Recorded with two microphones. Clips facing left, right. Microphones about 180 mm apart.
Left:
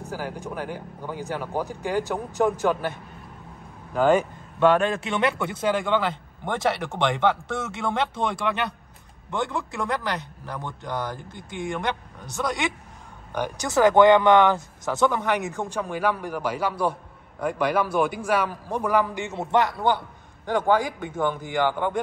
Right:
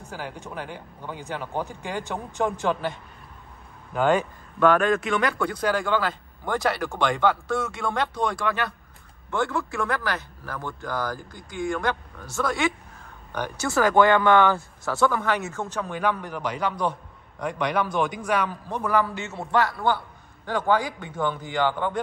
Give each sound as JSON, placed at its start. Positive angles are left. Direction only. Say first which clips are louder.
{"t": 1.3, "sound": "speech", "louder": "left 1 dB", "side_deg": 5}
{"t": 3.9, "sound": "speech", "louder": "left 2 dB", "side_deg": 5}
{"t": 4.6, "sound": "speech", "louder": "even", "side_deg": 30}